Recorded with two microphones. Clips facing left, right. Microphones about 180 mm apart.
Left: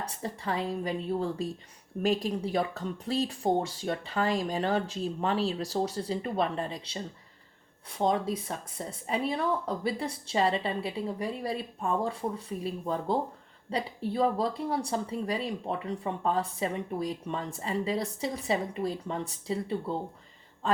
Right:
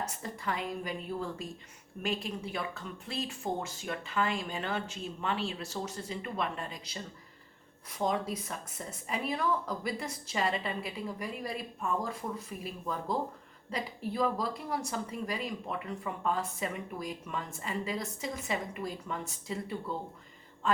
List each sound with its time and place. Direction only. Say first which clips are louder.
0.0 s speech: left 2 dB; 30° left (ahead or behind)